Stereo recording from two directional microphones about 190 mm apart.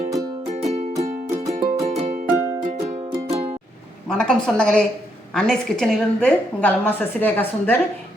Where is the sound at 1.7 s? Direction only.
35° right (ahead or behind).